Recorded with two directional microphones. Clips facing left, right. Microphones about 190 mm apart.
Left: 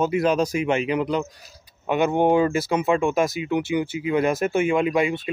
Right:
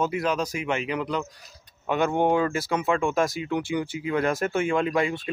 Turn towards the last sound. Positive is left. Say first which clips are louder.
# left 3 dB
turn(degrees=15)  # may be behind; listen again after turning